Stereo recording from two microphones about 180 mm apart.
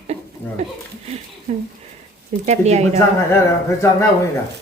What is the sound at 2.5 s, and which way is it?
Speech, 35° right (ahead or behind).